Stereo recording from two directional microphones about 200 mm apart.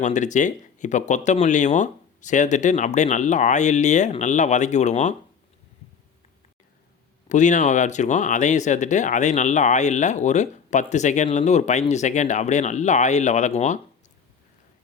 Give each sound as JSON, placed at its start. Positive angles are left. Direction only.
{"t": 0.0, "sound": "speech", "side_deg": 35}
{"t": 7.3, "sound": "speech", "side_deg": 40}